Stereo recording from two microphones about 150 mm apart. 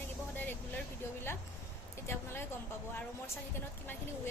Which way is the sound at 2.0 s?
15° left (ahead or behind).